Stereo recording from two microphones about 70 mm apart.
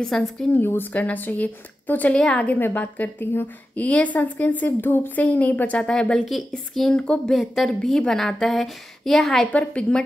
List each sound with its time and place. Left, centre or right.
0.0 s a woman's voice: centre
0.5 s a woman's voice: left; by 7.0 s centre
7.0 s a woman's voice: centre
7.3 s a woman's voice: centre
9.5 s a woman's voice: centre